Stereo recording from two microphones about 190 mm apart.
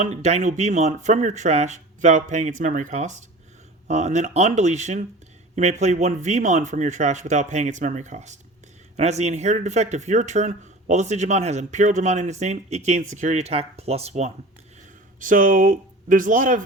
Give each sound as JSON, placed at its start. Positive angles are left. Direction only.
{"t": 0.0, "sound": "speech", "side_deg": -35}